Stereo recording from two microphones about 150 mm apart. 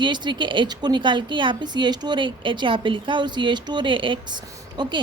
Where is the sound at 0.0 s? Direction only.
30° right (ahead or behind).